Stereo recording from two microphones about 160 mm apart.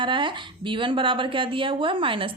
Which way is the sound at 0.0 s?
30° right (ahead or behind).